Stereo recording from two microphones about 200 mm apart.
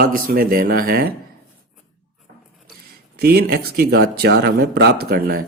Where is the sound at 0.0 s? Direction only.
50° right (ahead or behind).